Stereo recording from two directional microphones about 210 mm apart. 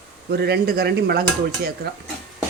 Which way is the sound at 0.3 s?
50° right (ahead or behind).